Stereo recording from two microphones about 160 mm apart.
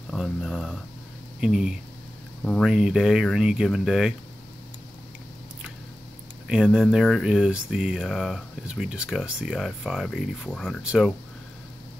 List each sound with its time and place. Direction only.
0.1 s speech: centre (ahead or behind)
2.4 s speech: 5° left (ahead or behind)
6.4 s speech: 5° right (ahead or behind)